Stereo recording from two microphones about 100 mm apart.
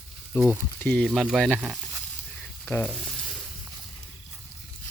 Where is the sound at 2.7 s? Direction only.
15° left (ahead or behind).